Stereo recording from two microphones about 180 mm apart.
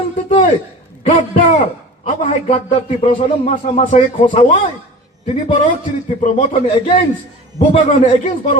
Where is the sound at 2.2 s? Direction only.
45° left (ahead or behind).